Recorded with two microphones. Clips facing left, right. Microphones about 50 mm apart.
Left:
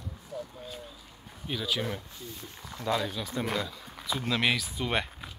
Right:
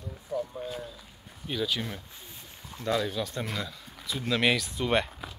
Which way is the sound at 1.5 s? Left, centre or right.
Centre.